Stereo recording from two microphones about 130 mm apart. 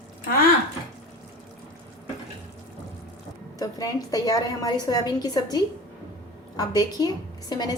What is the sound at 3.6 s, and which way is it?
A woman's voice, 25° left (ahead or behind).